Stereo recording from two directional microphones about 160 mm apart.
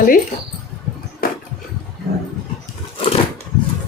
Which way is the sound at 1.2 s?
65° left (ahead or behind).